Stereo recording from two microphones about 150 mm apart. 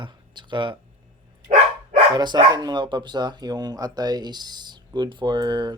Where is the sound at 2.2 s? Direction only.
30° right (ahead or behind).